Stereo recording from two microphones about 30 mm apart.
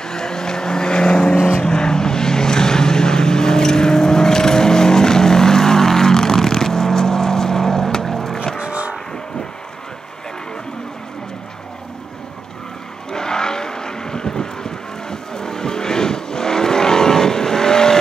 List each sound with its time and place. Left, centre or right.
0.0 s vehicle: left
8.5 s vehicle: right
13.1 s vehicle: left